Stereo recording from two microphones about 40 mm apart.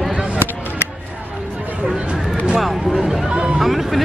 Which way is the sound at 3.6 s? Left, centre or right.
Centre.